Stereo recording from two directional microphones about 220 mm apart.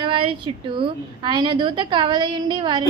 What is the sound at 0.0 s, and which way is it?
A woman's voice, 25° right (ahead or behind).